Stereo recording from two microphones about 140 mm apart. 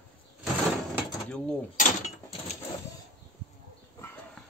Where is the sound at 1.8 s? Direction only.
55° left (ahead or behind).